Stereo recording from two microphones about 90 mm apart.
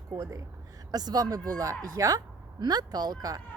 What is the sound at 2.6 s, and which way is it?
Speech, 50° right (ahead or behind).